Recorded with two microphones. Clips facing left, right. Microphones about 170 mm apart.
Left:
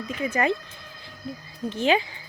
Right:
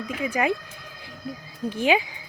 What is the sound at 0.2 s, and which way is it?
Speech, 10° right (ahead or behind).